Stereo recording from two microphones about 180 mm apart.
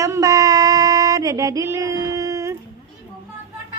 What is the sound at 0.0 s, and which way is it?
Female singing, 20° right (ahead or behind).